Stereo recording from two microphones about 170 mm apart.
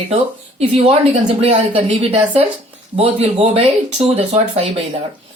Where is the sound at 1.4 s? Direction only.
35° right (ahead or behind).